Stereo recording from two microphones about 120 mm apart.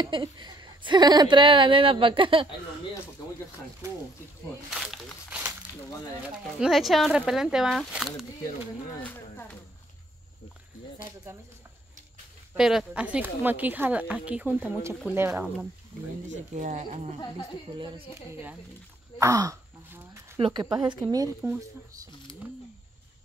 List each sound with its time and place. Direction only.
0.0 s a woman's voice: 40° right (ahead or behind)
4.6 s speech: 5° right (ahead or behind)
6.6 s speech: centre (ahead or behind)
9.0 s speech: 15° left (ahead or behind)
11.3 s speech: 20° right (ahead or behind)
12.5 s a woman's voice: 5° right (ahead or behind); by 15.4 s 20° right (ahead or behind)
16.5 s speech: 80° right
17.7 s speech: 40° right (ahead or behind)
19.1 s speech: 25° right (ahead or behind)
20.3 s speech: 45° right (ahead or behind)
20.8 s speech: 35° right (ahead or behind)